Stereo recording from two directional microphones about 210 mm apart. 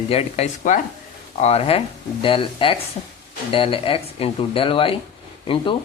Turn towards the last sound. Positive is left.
turn(degrees=25)  # may be behind; listen again after turning